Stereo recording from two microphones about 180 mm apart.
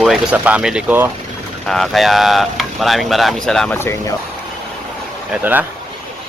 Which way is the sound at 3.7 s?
15° left (ahead or behind).